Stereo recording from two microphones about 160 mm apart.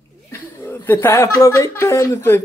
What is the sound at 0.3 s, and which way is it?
Speech, 15° left (ahead or behind).